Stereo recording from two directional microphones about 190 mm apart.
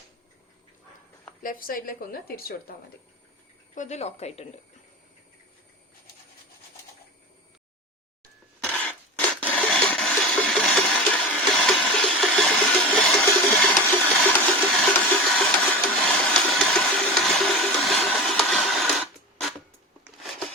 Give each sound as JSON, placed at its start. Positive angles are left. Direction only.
{"t": 1.4, "sound": "a woman's voice", "side_deg": 50}
{"t": 3.8, "sound": "speech", "side_deg": 35}
{"t": 8.6, "sound": "rub", "side_deg": 5}